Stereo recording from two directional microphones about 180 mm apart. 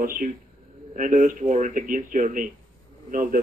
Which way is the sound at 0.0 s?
50° right (ahead or behind).